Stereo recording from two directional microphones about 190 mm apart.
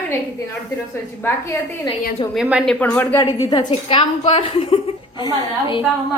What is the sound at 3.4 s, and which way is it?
A woman's voice, 20° left (ahead or behind).